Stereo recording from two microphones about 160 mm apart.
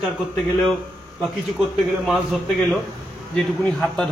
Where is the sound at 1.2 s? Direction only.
Centre (ahead or behind).